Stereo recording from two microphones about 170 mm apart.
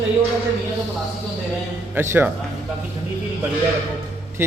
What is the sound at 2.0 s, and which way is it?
Speech, 10° right (ahead or behind).